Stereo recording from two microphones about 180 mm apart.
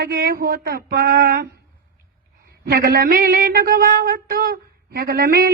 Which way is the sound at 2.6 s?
60° right (ahead or behind).